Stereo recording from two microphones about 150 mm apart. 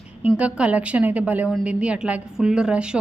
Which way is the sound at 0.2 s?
10° right (ahead or behind).